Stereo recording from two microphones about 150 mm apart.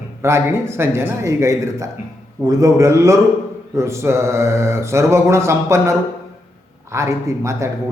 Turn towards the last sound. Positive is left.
turn(degrees=-20)  # may be behind; listen again after turning